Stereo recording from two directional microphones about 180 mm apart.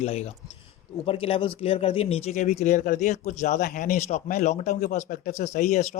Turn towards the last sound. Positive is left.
turn(degrees=40)  # may be behind; listen again after turning